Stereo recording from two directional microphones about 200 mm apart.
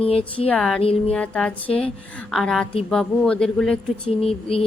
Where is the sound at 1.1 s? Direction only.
5° left (ahead or behind).